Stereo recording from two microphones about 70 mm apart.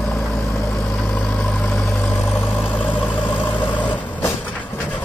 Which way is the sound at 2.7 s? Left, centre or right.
Left.